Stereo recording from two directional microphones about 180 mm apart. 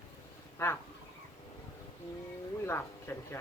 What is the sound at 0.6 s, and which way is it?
Speech, 15° left (ahead or behind).